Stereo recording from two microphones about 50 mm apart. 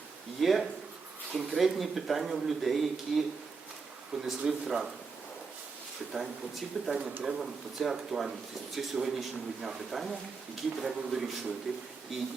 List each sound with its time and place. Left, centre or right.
0.3 s a man's voice: centre
4.3 s a man's voice: centre
6.1 s a man's voice: centre